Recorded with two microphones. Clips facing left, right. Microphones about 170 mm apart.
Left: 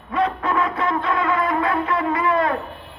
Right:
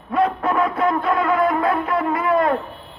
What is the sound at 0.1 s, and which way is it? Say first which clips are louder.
Music: right 2 dB; 50° right (ahead or behind).